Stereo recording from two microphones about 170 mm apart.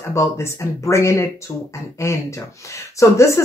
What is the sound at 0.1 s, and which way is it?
Speech, 15° left (ahead or behind).